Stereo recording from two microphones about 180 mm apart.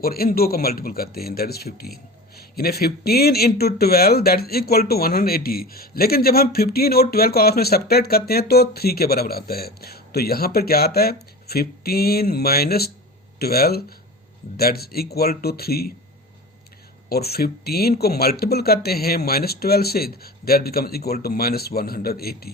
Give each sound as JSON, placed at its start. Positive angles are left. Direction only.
{"t": 0.0, "sound": "speech", "side_deg": 55}
{"t": 17.1, "sound": "speech", "side_deg": 60}